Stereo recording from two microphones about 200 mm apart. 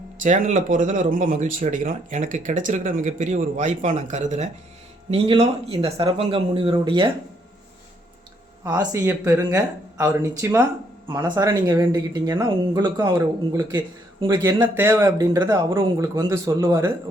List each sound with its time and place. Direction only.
0.2 s speech: 40° right (ahead or behind)
8.6 s speech: 20° right (ahead or behind)